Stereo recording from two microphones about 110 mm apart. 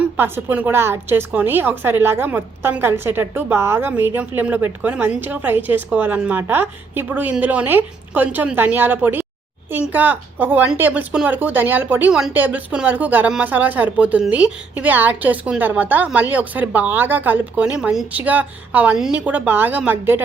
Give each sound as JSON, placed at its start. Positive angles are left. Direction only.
{"t": 0.0, "sound": "a woman's voice", "side_deg": -20}